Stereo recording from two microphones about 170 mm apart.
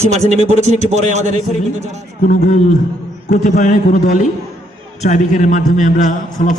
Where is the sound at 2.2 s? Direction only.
45° left (ahead or behind).